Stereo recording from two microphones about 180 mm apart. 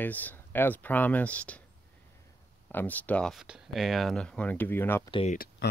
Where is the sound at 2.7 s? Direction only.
10° left (ahead or behind).